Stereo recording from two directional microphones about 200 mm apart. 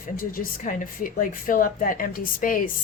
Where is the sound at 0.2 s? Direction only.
45° left (ahead or behind).